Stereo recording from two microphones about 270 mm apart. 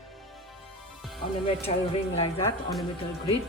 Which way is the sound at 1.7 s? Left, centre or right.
Left.